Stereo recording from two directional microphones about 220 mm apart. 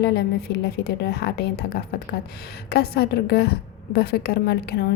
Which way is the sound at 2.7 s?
45° left (ahead or behind).